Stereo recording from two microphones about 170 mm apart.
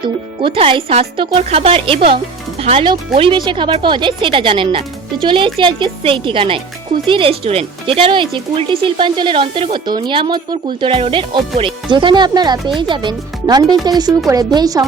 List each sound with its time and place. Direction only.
0.0 s speech: 30° right (ahead or behind)